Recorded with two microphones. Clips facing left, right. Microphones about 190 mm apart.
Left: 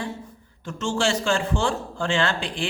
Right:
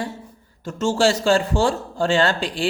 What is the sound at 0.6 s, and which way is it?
Speech, 40° right (ahead or behind).